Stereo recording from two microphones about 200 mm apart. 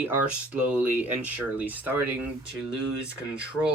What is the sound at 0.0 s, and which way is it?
Speech, 10° right (ahead or behind).